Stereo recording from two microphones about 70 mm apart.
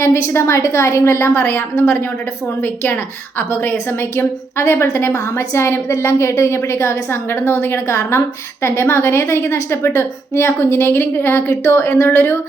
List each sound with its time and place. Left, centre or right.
0.0 s a woman's voice: left